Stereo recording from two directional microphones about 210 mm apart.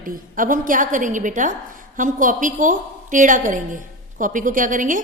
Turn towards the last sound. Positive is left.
turn(degrees=-40)  # may be behind; listen again after turning